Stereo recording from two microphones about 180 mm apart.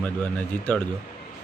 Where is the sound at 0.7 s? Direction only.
10° left (ahead or behind).